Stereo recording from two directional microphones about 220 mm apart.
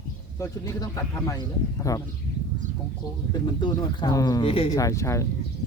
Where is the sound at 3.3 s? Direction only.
20° left (ahead or behind).